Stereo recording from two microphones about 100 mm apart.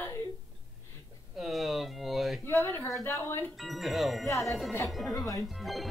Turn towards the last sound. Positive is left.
turn(degrees=0)  # may be behind; listen again after turning